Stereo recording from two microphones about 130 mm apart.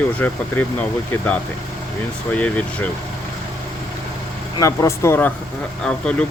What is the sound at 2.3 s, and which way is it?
Speech, 10° left (ahead or behind).